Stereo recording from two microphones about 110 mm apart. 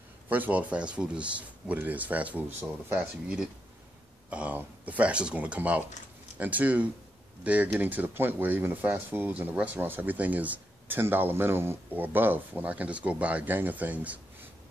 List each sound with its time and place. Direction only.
0.3 s speech: 15° right (ahead or behind)
4.3 s speech: 15° right (ahead or behind)